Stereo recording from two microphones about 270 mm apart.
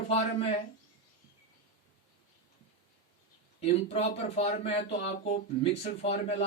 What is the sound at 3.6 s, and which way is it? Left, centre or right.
A man's voice, left.